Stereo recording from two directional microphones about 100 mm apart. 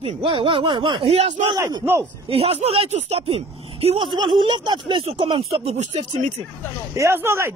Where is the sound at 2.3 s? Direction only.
90° right.